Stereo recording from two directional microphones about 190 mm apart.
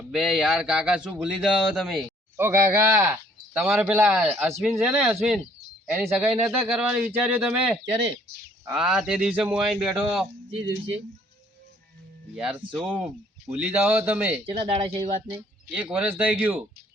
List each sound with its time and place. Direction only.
0.1 s speech: 5° right (ahead or behind)
2.3 s speech: 15° right (ahead or behind)
12.4 s speech: 5° right (ahead or behind)
14.4 s speech: 30° right (ahead or behind)
15.7 s speech: 5° right (ahead or behind)